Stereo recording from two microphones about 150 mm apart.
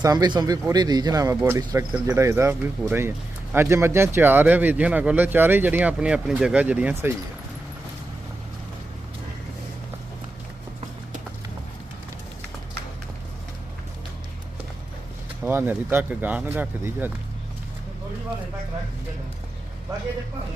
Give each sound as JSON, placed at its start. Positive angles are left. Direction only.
{"t": 0.0, "sound": "speech", "side_deg": -25}
{"t": 15.4, "sound": "speech", "side_deg": -15}